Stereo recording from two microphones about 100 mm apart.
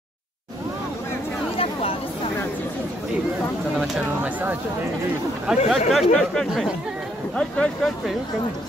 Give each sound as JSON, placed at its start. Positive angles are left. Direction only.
{"t": 1.6, "sound": "chatter", "side_deg": 75}
{"t": 4.2, "sound": "speech", "side_deg": -15}
{"t": 5.7, "sound": "speech", "side_deg": 0}